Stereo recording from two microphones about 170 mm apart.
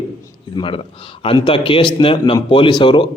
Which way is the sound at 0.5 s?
30° left (ahead or behind).